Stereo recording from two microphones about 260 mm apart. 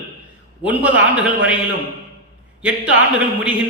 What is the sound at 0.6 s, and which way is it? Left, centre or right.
Speech, centre.